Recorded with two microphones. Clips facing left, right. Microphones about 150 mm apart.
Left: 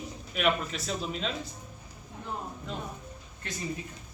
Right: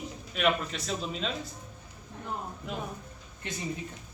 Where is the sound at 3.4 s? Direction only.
20° right (ahead or behind).